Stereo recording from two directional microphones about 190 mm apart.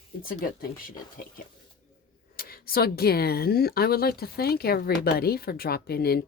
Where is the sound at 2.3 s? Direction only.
50° left (ahead or behind).